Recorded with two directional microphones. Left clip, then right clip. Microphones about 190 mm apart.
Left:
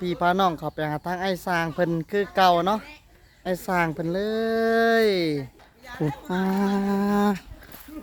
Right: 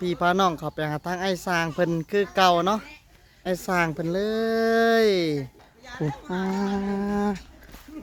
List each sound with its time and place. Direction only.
0.0 s speech: 5° right (ahead or behind)
5.8 s speech: 10° left (ahead or behind)